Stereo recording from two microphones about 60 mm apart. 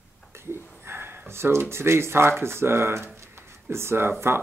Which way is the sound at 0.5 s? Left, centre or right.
Right.